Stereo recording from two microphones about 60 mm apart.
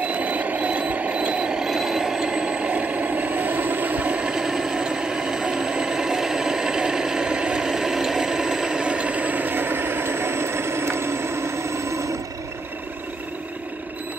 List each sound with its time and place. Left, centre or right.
0.0 s vehicle: right